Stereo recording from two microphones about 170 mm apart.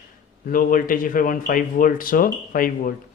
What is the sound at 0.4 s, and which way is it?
Speech, 55° left (ahead or behind).